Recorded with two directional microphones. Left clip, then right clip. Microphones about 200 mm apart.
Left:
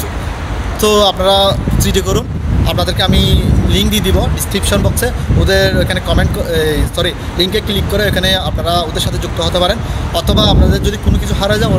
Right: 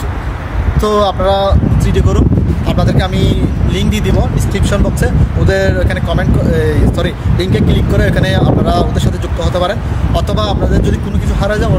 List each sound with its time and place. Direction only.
0.7 s speech: 5° right (ahead or behind)